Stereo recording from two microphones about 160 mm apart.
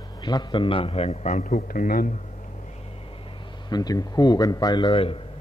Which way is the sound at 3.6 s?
25° left (ahead or behind).